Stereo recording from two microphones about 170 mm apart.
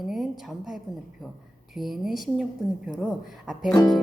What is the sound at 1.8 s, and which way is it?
Speech, centre (ahead or behind).